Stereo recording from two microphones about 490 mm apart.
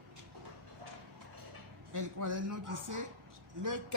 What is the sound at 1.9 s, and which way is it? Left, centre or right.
Speech, right.